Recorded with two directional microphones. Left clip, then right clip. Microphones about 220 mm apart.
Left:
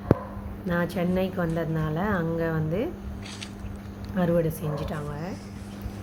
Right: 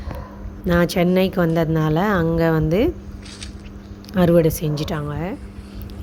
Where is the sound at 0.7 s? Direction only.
45° right (ahead or behind).